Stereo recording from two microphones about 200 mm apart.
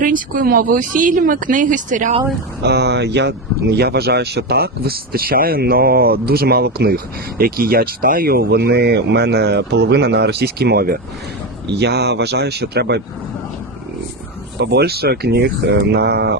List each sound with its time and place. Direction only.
0.0 s speech: 45° right (ahead or behind)
2.6 s speech: 55° right (ahead or behind)
14.6 s speech: 55° right (ahead or behind)